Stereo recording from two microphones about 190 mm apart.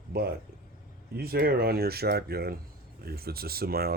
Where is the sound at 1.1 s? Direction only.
55° right (ahead or behind).